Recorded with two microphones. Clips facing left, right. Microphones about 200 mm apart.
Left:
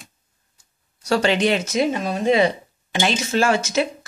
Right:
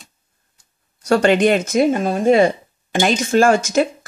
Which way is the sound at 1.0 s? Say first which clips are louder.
Right 5 dB; 50° right (ahead or behind).